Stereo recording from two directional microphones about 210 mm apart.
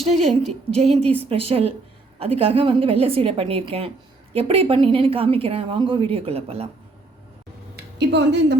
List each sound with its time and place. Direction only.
0.2 s a woman's voice: 90° right
1.0 s speech: 10° left (ahead or behind)
1.3 s a woman's voice: 30° right (ahead or behind)
7.9 s speech: 55° right (ahead or behind)